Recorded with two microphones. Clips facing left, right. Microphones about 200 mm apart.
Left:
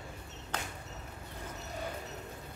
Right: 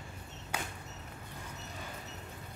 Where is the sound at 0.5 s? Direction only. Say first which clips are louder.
Even; 10° right (ahead or behind).